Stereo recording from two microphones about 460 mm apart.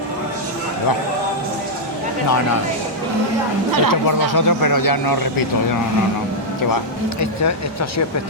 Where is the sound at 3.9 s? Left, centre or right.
Left.